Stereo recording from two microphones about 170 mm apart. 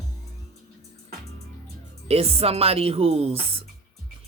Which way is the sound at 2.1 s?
35° right (ahead or behind).